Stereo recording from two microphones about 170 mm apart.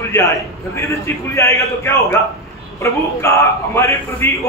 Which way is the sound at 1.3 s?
15° left (ahead or behind).